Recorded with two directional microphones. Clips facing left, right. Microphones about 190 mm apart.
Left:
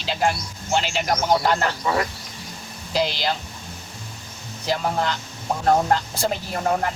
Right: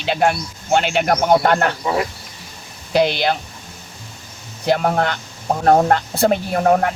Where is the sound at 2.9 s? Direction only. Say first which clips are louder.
Right 7 dB; 60° right (ahead or behind).